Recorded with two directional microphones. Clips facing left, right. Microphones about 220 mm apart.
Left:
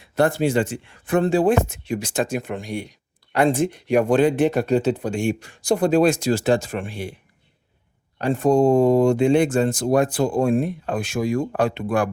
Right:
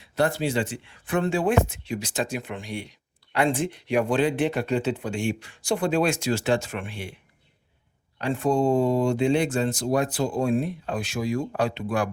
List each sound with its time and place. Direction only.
0.0 s speech: 50° left (ahead or behind)
8.2 s speech: 40° left (ahead or behind)